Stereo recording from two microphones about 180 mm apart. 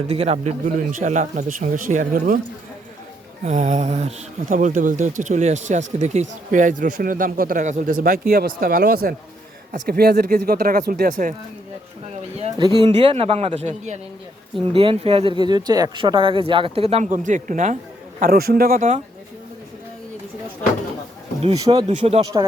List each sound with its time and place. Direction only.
0.1 s speech: 35° right (ahead or behind)
3.4 s speech: 40° right (ahead or behind)
12.4 s speech: 25° right (ahead or behind); by 17.7 s 45° right (ahead or behind)
18.2 s speech: 55° right (ahead or behind)
21.5 s speech: 20° right (ahead or behind)
21.8 s speech: 35° right (ahead or behind)